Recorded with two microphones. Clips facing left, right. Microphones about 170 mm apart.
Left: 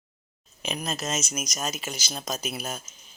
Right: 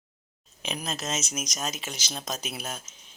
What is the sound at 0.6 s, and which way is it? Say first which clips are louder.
Speech: left 2 dB; centre (ahead or behind).